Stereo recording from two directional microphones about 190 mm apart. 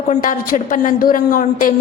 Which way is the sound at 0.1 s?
45° left (ahead or behind).